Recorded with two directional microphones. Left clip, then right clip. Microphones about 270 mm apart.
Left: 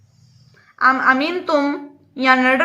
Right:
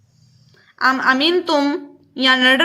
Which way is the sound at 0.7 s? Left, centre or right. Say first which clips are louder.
Left 1 dB; right.